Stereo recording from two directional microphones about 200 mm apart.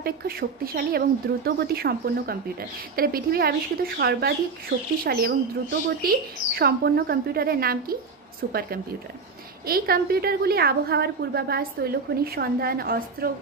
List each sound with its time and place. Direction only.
0.0 s a woman's voice: 50° right (ahead or behind)